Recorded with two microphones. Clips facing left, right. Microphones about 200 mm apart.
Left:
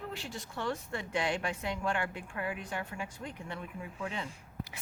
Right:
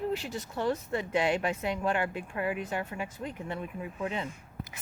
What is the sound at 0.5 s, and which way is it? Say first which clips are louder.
Speech: right 6 dB; 40° right (ahead or behind).